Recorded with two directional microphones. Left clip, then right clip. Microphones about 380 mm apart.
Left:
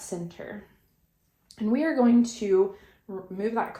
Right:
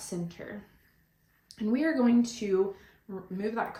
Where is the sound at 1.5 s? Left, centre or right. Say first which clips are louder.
Left 4 dB; centre.